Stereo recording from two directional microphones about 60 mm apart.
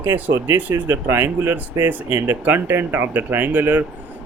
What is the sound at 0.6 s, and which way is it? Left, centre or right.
Speech, right.